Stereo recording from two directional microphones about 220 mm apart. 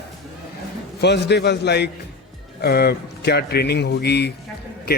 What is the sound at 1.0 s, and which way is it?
A man's voice, 50° left (ahead or behind).